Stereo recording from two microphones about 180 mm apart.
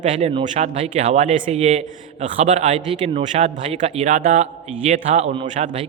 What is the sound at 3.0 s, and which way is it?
Speech, 35° right (ahead or behind).